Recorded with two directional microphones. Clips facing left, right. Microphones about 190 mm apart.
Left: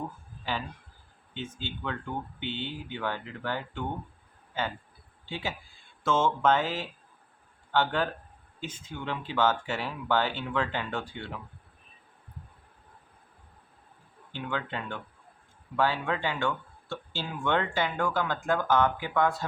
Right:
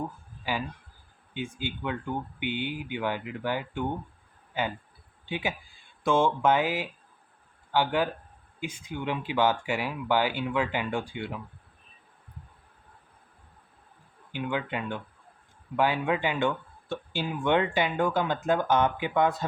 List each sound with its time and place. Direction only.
0.5 s speech: 10° right (ahead or behind)
14.3 s speech: 15° right (ahead or behind)